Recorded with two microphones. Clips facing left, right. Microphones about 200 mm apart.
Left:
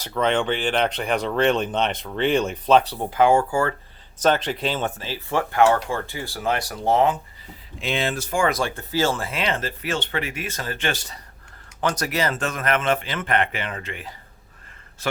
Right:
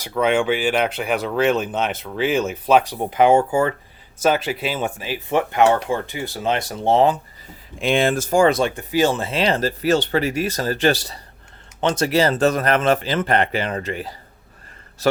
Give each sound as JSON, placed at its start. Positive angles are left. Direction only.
{"t": 0.0, "sound": "speech", "side_deg": -10}
{"t": 4.2, "sound": "speech", "side_deg": -10}
{"t": 7.8, "sound": "speech", "side_deg": -50}
{"t": 8.4, "sound": "speech", "side_deg": -25}
{"t": 11.8, "sound": "speech", "side_deg": -25}